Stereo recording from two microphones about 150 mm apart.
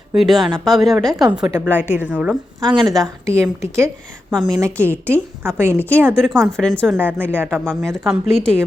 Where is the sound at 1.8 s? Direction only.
10° right (ahead or behind).